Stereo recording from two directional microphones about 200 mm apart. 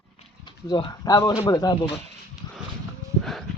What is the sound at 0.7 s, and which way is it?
Speech, 20° left (ahead or behind).